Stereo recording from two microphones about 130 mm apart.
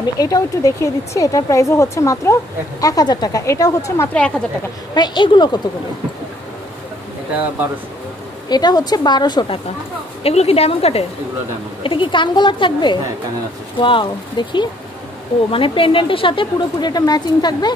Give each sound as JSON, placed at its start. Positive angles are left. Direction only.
{"t": 0.0, "sound": "speech", "side_deg": 30}
{"t": 4.1, "sound": "speech", "side_deg": 10}
{"t": 4.9, "sound": "a woman's voice", "side_deg": 35}
{"t": 8.5, "sound": "a woman's voice", "side_deg": 30}
{"t": 10.2, "sound": "a woman's voice", "side_deg": 50}
{"t": 11.8, "sound": "a woman's voice", "side_deg": 40}